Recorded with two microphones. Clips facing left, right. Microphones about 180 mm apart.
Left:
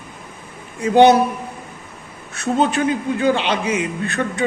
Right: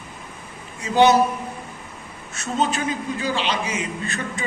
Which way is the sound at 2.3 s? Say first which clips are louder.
Left 5 dB; 60° left (ahead or behind).